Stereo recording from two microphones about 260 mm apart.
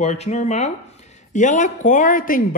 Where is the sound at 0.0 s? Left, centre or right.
Left.